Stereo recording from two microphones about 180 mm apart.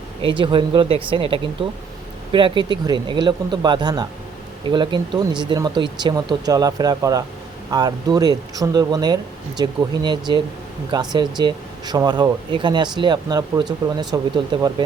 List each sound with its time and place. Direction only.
0.2 s speech: 25° right (ahead or behind)